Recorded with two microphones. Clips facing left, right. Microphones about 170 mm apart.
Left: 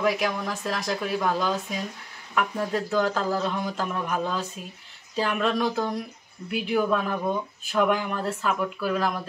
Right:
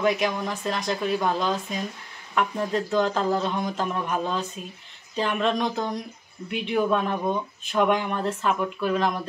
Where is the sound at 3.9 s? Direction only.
Centre (ahead or behind).